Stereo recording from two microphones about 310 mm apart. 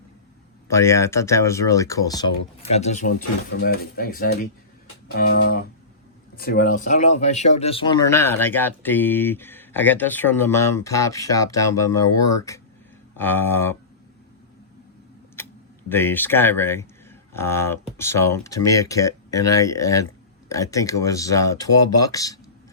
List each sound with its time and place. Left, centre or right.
0.7 s speech: centre
2.7 s speech: left; by 13.7 s centre
15.9 s speech: centre